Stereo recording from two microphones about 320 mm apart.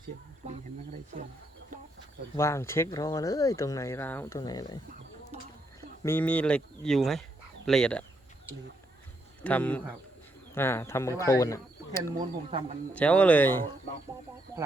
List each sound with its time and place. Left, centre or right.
2.3 s speech: centre
6.0 s speech: centre
9.4 s speech: centre
12.1 s speech: centre
12.9 s speech: centre
14.5 s speech: centre